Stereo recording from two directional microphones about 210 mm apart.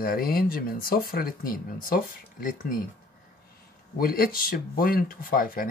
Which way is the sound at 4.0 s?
45° left (ahead or behind).